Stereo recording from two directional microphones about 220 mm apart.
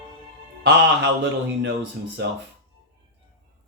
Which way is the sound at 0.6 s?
50° right (ahead or behind).